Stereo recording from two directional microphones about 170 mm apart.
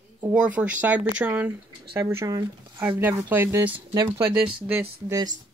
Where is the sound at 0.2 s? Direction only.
5° right (ahead or behind).